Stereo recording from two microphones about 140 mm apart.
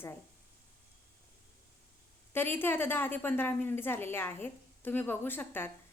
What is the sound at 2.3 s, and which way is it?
A woman's voice, 15° left (ahead or behind).